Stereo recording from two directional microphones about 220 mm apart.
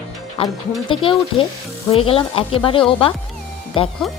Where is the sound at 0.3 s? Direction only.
25° left (ahead or behind).